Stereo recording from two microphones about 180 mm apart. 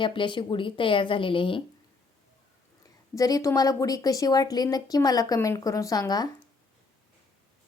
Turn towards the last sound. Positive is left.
turn(degrees=20)  # may be behind; listen again after turning